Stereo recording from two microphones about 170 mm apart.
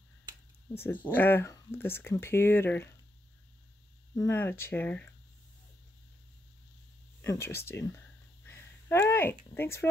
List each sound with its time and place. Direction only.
1.0 s speech: 10° left (ahead or behind)
4.2 s speech: 15° left (ahead or behind)
7.2 s speech: 15° left (ahead or behind)
8.5 s a sound: 15° left (ahead or behind)
9.5 s speech: 15° left (ahead or behind)